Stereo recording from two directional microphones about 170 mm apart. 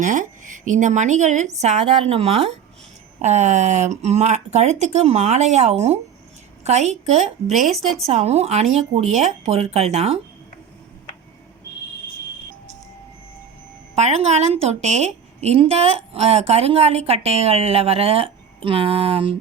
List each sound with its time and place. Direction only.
0.0 s a woman's voice: 50° right (ahead or behind)
13.9 s a woman's voice: 40° right (ahead or behind)